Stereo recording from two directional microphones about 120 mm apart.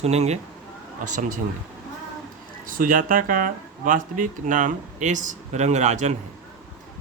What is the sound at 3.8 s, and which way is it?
Speech, 90° right.